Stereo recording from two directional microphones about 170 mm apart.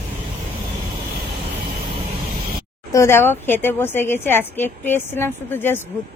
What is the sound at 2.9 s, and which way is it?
A woman's voice, 15° left (ahead or behind).